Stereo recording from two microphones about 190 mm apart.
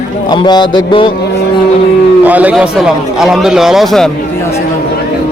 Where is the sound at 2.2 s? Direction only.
10° right (ahead or behind).